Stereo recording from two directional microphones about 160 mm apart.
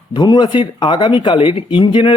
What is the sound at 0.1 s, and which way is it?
Speech, 25° left (ahead or behind).